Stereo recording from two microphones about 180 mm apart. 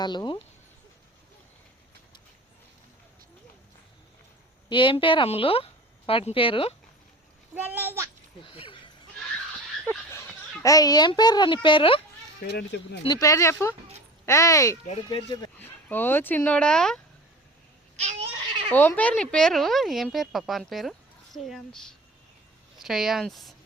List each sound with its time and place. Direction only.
0.0 s a child's voice: 25° left (ahead or behind)
4.7 s a child's voice: 25° left (ahead or behind)
7.5 s a child's voice: 10° right (ahead or behind)
8.4 s speech: 30° left (ahead or behind)
9.8 s a sound: 10° left (ahead or behind)
10.6 s a child's voice: 20° left (ahead or behind)
12.4 s speech: 65° left (ahead or behind)
13.1 s speech: 20° left (ahead or behind)
14.8 s a child's voice: 30° left (ahead or behind)
15.5 s speech: 10° left (ahead or behind)
17.9 s cat: 40° right (ahead or behind)
18.7 s speech: 10° left (ahead or behind)